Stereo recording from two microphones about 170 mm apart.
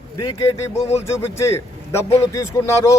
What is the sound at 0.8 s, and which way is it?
Speech, 40° left (ahead or behind).